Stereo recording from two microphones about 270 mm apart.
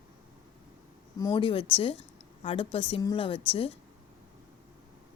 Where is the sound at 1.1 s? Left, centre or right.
Centre.